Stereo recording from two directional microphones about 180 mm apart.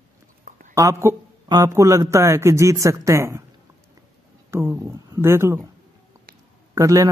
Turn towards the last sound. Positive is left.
turn(degrees=-20)  # may be behind; listen again after turning